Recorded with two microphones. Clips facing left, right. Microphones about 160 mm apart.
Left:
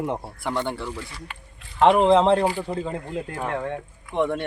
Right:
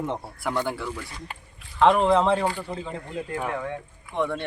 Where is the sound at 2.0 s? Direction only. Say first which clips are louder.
Left 4 dB; 20° left (ahead or behind).